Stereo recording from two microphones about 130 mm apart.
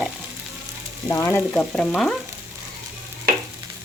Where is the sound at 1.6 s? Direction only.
5° left (ahead or behind).